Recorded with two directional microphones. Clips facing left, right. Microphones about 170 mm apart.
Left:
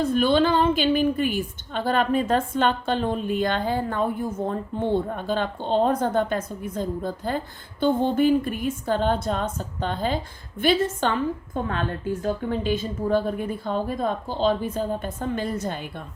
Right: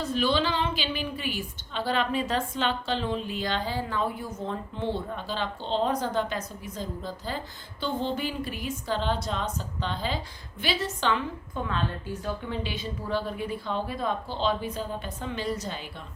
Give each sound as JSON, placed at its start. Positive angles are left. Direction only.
{"t": 0.0, "sound": "a woman's voice", "side_deg": 50}